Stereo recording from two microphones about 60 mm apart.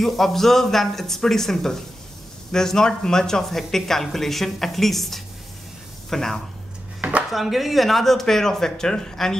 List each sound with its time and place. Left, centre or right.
0.0 s speech: centre
7.0 s dishes: right
7.2 s speech: centre